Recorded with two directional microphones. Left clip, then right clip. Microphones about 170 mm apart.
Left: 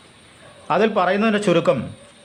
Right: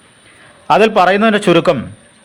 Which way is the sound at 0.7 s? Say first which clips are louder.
Right 8 dB; 30° right (ahead or behind).